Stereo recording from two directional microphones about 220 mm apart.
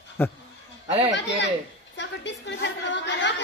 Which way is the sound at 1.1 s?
55° left (ahead or behind).